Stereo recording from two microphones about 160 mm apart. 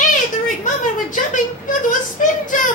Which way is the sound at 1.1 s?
55° left (ahead or behind).